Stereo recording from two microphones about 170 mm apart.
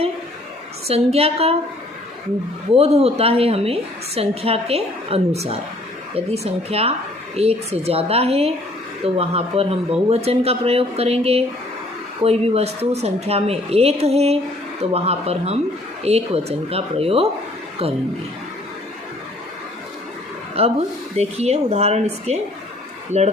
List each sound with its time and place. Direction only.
0.9 s a woman's voice: 35° right (ahead or behind)
2.7 s a woman's voice: 35° right (ahead or behind)
20.6 s a woman's voice: 35° right (ahead or behind)